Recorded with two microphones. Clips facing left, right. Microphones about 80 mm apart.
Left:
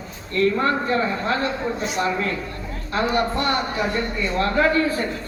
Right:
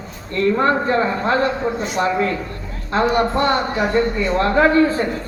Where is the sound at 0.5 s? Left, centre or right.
Right.